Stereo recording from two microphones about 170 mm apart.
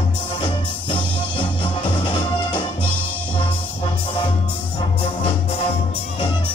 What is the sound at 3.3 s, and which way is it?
Music, 30° left (ahead or behind).